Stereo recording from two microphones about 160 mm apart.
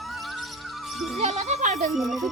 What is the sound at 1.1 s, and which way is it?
Speech, 40° right (ahead or behind).